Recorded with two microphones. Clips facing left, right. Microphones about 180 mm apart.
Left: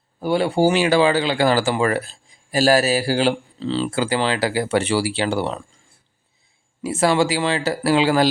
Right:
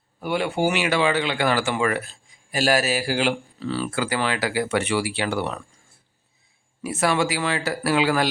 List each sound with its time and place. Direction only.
0.2 s speech: 35° left (ahead or behind)
6.8 s speech: 30° left (ahead or behind)